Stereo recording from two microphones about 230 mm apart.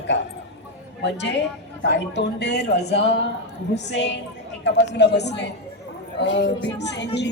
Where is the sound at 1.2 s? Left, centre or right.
Left.